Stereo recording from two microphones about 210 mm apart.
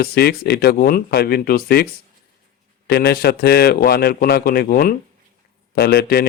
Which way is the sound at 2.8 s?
50° left (ahead or behind).